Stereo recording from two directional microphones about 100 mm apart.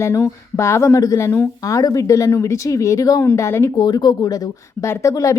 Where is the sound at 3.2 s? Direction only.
25° left (ahead or behind).